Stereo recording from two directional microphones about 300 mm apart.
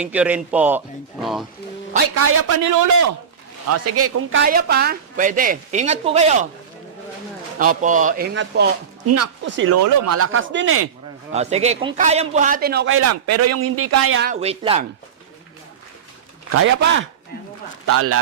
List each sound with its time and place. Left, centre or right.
0.0 s speech: centre
2.1 s speech: right
3.7 s a man's voice: right
4.4 s a woman's voice: right
7.6 s a woman's voice: right
9.0 s a man's voice: right
9.5 s a man's voice: right
9.7 s a man's voice: right
11.3 s a woman's voice: right
13.0 s a man's voice: right
14.2 s a woman's voice: right
16.5 s a man's voice: right